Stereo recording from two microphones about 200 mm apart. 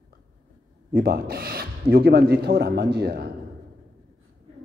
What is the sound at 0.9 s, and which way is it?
A man's voice, 50° right (ahead or behind).